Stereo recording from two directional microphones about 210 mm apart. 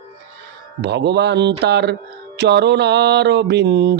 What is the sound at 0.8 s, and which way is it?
Speech, 55° right (ahead or behind).